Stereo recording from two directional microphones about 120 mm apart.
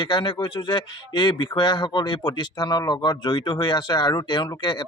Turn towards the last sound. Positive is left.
turn(degrees=35)  # may be behind; listen again after turning